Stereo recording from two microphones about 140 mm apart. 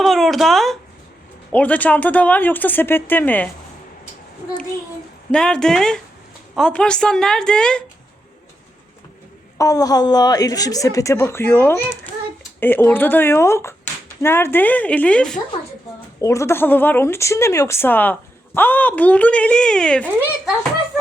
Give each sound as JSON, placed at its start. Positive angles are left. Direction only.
{"t": 0.0, "sound": "a woman's voice", "side_deg": 0}
{"t": 5.3, "sound": "a woman's voice", "side_deg": 5}
{"t": 9.6, "sound": "a woman's voice", "side_deg": 25}
{"t": 16.2, "sound": "speech", "side_deg": 20}